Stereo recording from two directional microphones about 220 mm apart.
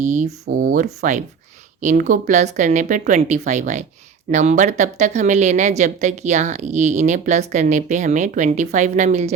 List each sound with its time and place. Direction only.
0.0 s a woman's voice: 35° right (ahead or behind)